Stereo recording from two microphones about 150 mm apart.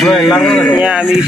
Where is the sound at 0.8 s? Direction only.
5° right (ahead or behind).